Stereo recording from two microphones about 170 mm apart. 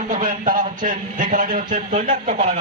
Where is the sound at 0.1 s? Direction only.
50° right (ahead or behind).